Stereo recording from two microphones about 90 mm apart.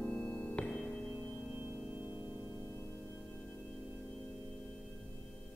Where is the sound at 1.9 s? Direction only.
20° right (ahead or behind).